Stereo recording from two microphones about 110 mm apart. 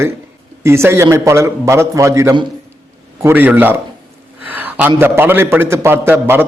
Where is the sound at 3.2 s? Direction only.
15° right (ahead or behind).